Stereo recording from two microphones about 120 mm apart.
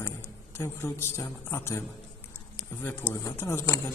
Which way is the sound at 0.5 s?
20° left (ahead or behind).